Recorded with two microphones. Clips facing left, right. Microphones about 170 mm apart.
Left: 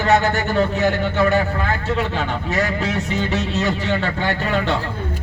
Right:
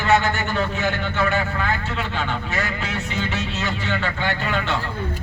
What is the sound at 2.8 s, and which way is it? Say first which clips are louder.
Speech: left 5 dB; 40° left (ahead or behind).